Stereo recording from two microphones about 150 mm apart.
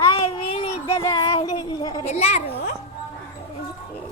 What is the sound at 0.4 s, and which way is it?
Child singing, 35° left (ahead or behind).